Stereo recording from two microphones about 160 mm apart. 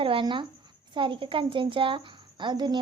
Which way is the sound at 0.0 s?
30° right (ahead or behind).